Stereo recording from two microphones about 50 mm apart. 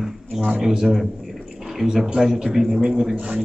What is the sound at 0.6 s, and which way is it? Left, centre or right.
A man's voice, centre.